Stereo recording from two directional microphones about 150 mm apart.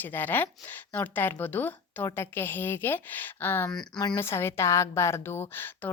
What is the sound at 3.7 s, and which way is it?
Speech, 5° left (ahead or behind).